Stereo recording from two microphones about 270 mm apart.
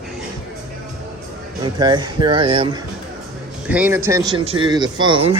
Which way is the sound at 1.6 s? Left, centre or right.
Centre.